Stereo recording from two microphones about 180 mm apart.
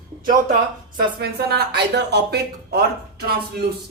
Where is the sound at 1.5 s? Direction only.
65° right (ahead or behind).